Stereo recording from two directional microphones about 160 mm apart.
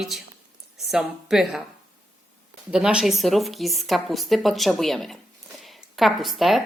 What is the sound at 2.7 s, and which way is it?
A woman's voice, 5° right (ahead or behind).